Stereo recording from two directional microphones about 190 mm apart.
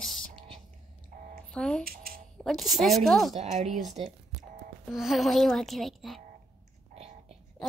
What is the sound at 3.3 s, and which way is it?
Speech, 35° right (ahead or behind).